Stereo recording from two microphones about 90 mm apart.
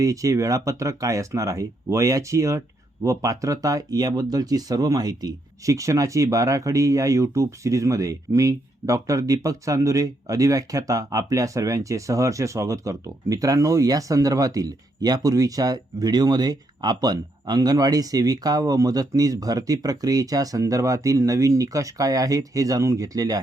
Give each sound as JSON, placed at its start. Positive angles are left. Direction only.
{"t": 0.0, "sound": "speech", "side_deg": -40}